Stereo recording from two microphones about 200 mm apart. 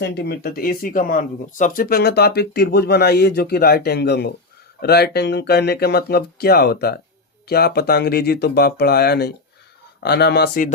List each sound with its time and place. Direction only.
0.0 s speech: 55° left (ahead or behind)